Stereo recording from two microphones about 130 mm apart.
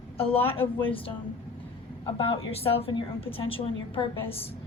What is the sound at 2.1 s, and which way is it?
A woman's voice, 45° left (ahead or behind).